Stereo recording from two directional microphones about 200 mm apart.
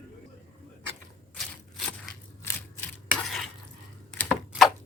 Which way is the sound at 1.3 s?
Centre (ahead or behind).